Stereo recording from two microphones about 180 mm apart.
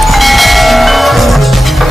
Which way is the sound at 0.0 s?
Centre (ahead or behind).